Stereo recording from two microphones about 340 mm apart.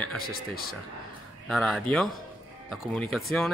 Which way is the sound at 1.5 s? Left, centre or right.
Centre.